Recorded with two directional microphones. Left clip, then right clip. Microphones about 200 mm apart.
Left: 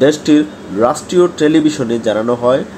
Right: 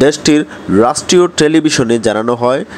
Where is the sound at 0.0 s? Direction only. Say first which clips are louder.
Right 1 dB; 30° right (ahead or behind).